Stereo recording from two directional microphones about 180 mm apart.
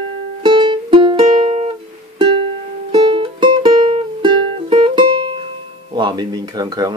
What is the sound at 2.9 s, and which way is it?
Music, 30° right (ahead or behind).